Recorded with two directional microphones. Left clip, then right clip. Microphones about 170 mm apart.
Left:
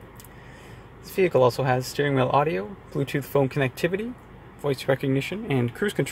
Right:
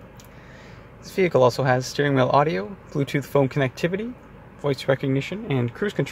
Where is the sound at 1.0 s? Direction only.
15° right (ahead or behind).